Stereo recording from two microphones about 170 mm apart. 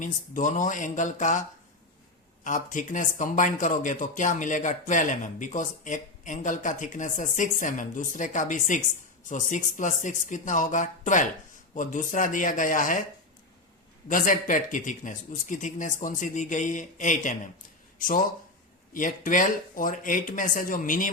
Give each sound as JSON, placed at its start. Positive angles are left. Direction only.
{"t": 0.0, "sound": "a man's voice", "side_deg": 50}
{"t": 14.1, "sound": "a man's voice", "side_deg": 50}
{"t": 18.9, "sound": "a man's voice", "side_deg": 50}